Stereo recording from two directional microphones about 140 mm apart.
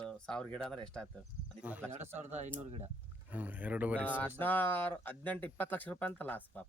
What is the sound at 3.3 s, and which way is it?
Speech, 10° right (ahead or behind).